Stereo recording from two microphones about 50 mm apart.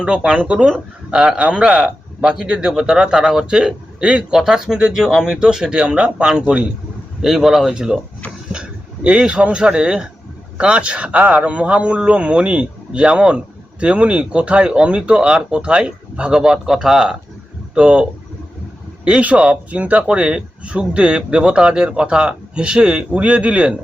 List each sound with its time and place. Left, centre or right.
0.0 s a man's voice: centre
7.2 s speech: centre
8.5 s a man's voice: right
19.0 s a man's voice: right